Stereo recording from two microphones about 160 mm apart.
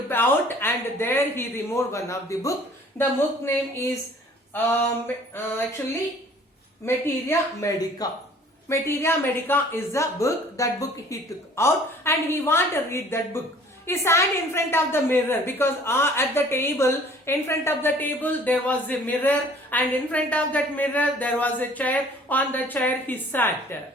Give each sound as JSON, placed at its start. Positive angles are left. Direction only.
{"t": 0.1, "sound": "a woman's voice", "side_deg": 15}
{"t": 5.0, "sound": "a woman's voice", "side_deg": 10}
{"t": 6.8, "sound": "a woman's voice", "side_deg": 15}